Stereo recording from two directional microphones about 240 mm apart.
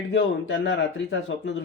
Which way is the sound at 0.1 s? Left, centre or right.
Left.